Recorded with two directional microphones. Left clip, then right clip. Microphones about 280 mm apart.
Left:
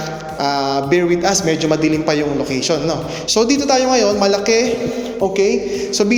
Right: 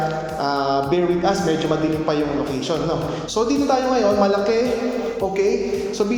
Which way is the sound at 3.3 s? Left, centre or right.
Left.